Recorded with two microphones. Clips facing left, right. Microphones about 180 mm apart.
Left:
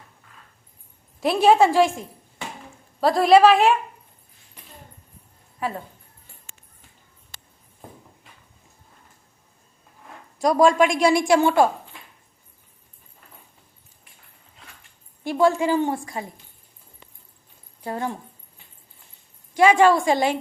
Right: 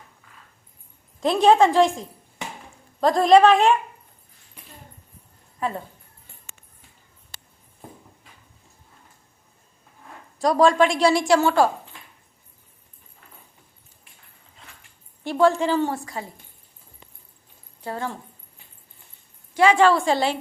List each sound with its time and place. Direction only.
1.2 s a woman's voice: 5° left (ahead or behind)
5.5 s a woman's voice: 5° left (ahead or behind)
10.3 s a woman's voice: 15° left (ahead or behind)
15.2 s a woman's voice: 10° left (ahead or behind)
17.8 s a woman's voice: 15° left (ahead or behind)
19.5 s a woman's voice: 10° left (ahead or behind)